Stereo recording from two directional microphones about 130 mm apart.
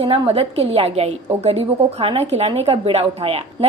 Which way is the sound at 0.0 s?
40° right (ahead or behind).